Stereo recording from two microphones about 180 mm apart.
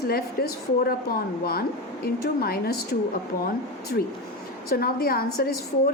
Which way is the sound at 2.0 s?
60° left (ahead or behind).